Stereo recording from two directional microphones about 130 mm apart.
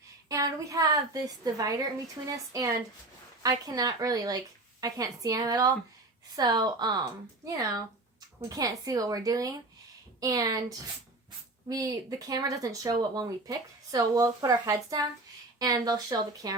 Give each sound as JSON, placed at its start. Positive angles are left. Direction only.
{"t": 0.3, "sound": "a woman's voice", "side_deg": -25}